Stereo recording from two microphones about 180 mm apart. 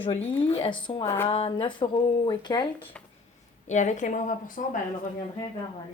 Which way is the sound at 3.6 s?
40° left (ahead or behind).